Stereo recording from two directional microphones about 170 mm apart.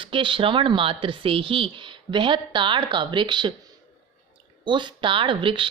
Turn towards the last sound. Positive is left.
turn(degrees=-30)  # may be behind; listen again after turning